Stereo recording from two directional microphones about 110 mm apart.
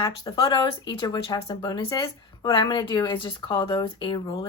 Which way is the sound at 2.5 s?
45° left (ahead or behind).